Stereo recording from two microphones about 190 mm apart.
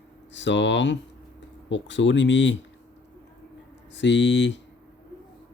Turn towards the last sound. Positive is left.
turn(degrees=70)  # may be behind; listen again after turning